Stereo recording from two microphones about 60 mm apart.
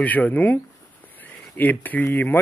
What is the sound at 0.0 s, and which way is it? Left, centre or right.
Speech, left.